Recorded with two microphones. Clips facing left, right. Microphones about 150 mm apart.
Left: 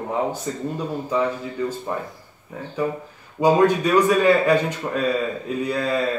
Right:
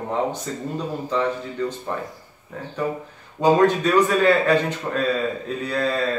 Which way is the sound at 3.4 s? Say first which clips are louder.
Even; 10° left (ahead or behind).